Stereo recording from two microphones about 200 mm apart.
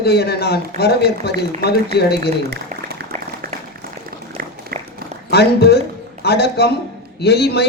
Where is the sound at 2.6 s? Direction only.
35° right (ahead or behind).